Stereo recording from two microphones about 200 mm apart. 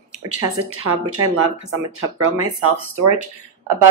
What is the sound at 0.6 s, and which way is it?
Speech, 90° right.